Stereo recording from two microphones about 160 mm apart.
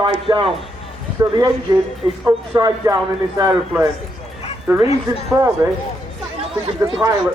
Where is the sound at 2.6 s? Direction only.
25° right (ahead or behind).